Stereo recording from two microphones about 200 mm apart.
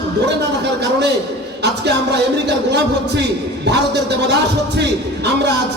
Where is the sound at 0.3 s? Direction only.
55° right (ahead or behind).